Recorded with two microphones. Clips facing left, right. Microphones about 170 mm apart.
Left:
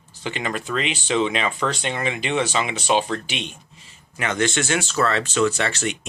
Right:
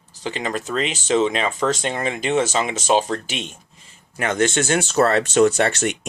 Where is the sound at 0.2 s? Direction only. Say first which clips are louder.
Right 2 dB; 35° right (ahead or behind).